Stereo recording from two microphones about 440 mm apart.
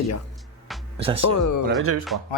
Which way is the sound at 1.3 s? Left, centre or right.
Left.